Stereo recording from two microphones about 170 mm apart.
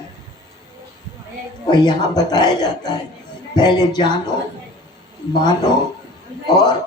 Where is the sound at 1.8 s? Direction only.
25° left (ahead or behind).